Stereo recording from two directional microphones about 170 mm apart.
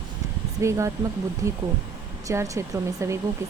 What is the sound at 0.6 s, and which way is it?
Speech, 15° right (ahead or behind).